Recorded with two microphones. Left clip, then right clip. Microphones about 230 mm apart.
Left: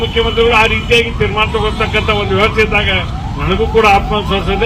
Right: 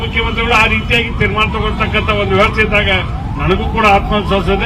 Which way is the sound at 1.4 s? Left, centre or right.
Right.